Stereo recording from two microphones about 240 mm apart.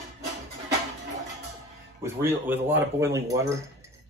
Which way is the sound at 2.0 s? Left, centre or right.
Centre.